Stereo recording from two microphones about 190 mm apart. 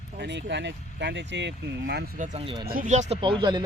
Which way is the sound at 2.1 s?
40° right (ahead or behind).